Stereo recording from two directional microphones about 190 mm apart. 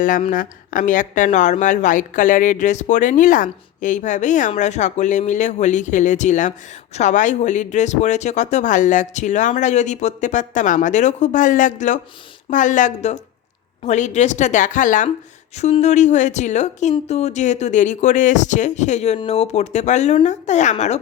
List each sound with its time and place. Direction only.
0.0 s speech: 45° left (ahead or behind)